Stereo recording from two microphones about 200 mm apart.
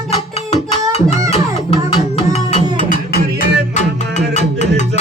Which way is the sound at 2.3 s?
35° left (ahead or behind).